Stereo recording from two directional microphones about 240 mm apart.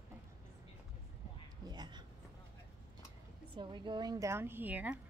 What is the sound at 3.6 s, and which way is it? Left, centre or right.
A woman's voice, centre.